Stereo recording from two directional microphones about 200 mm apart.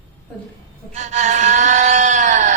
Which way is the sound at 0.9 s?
35° right (ahead or behind).